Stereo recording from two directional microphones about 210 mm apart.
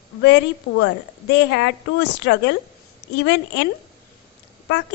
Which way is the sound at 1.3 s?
55° left (ahead or behind).